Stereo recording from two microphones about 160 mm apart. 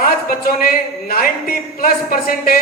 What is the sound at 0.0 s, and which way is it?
A man's voice, 65° left (ahead or behind).